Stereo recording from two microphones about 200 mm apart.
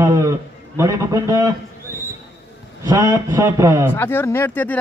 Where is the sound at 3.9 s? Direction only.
10° left (ahead or behind).